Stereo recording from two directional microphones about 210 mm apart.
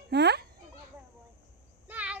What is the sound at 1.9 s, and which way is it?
Child singing, 5° right (ahead or behind).